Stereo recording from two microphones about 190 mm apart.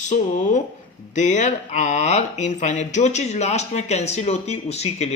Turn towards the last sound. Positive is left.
turn(degrees=35)  # may be behind; listen again after turning